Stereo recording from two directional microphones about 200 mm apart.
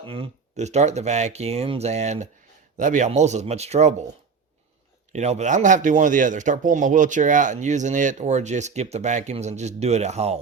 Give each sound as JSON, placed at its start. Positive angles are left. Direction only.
{"t": 0.0, "sound": "speech", "side_deg": -25}
{"t": 5.1, "sound": "speech", "side_deg": -35}